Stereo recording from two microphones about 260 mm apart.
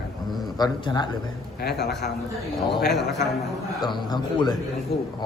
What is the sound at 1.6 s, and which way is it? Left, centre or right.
Speech, left.